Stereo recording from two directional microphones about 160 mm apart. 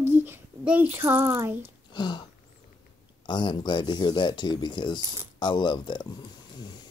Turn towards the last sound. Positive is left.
turn(degrees=25)  # may be behind; listen again after turning